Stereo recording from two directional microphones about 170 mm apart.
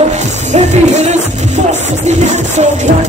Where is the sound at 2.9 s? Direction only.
55° right (ahead or behind).